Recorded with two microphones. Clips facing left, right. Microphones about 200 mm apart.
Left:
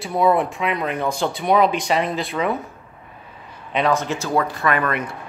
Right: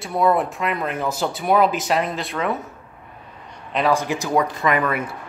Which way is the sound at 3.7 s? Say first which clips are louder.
Even; centre (ahead or behind).